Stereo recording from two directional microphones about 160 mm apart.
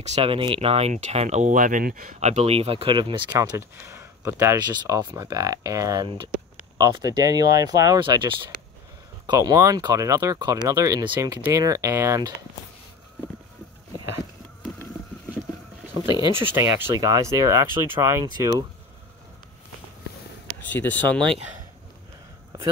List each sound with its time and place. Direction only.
0.0 s speech: 40° right (ahead or behind); by 2.1 s 60° right (ahead or behind)
2.1 s speech: 45° right (ahead or behind)
3.3 s speech: 15° right (ahead or behind)
16.5 s speech: 15° right (ahead or behind)
20.7 s speech: 10° left (ahead or behind)